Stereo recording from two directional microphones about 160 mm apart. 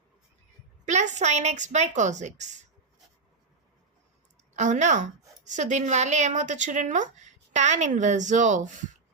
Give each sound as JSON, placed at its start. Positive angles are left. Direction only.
{"t": 0.9, "sound": "a woman's voice", "side_deg": -45}
{"t": 4.5, "sound": "a woman's voice", "side_deg": -50}